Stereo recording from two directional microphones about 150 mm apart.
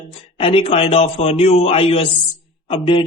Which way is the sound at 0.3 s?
40° left (ahead or behind).